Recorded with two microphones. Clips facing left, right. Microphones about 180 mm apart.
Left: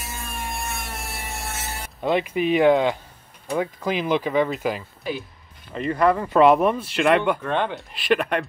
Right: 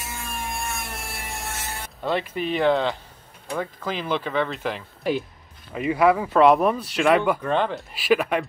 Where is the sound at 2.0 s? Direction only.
10° left (ahead or behind).